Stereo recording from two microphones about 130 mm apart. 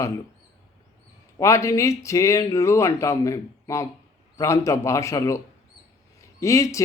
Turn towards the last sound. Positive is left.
turn(degrees=25)  # may be behind; listen again after turning